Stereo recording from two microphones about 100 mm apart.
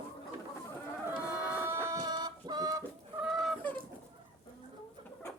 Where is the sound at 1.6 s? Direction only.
25° right (ahead or behind).